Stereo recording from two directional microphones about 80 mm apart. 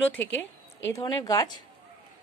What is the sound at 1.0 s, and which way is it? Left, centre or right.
Speech, left.